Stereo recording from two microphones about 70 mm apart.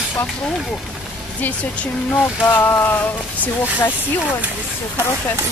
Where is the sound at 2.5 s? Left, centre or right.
Left.